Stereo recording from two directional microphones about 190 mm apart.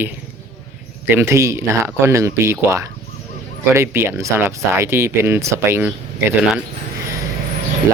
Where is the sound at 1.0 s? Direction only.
10° right (ahead or behind).